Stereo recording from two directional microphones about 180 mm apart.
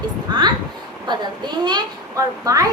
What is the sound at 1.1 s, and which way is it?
A child's voice, 25° right (ahead or behind).